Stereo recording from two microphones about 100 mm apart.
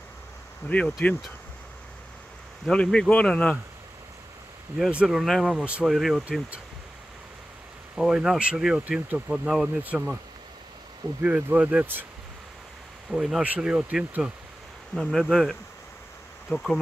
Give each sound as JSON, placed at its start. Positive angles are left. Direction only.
{"t": 0.7, "sound": "speech", "side_deg": 10}
{"t": 2.6, "sound": "speech", "side_deg": 10}
{"t": 4.7, "sound": "speech", "side_deg": -5}
{"t": 7.9, "sound": "speech", "side_deg": -5}
{"t": 11.2, "sound": "speech", "side_deg": -15}
{"t": 13.1, "sound": "speech", "side_deg": -5}
{"t": 15.0, "sound": "speech", "side_deg": 0}